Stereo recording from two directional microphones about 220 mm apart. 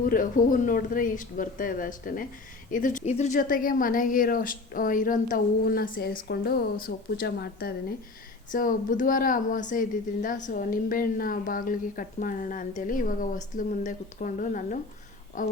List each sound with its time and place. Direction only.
0.0 s a woman's voice: 40° left (ahead or behind)